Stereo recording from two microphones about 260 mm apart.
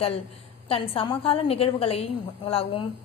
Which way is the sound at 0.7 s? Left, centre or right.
Centre.